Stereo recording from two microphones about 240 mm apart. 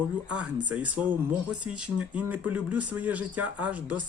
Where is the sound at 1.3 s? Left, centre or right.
Centre.